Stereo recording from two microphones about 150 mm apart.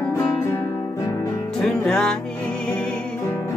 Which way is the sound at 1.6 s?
5° left (ahead or behind).